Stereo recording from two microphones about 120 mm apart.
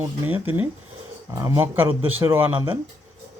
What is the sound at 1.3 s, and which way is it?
A man's voice, 25° right (ahead or behind).